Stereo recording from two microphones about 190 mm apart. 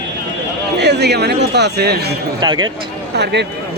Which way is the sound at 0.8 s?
60° right (ahead or behind).